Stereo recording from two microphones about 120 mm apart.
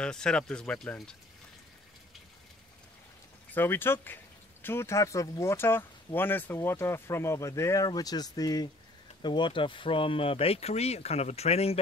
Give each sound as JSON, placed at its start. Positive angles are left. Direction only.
{"t": 0.0, "sound": "speech", "side_deg": 5}
{"t": 3.5, "sound": "speech", "side_deg": 20}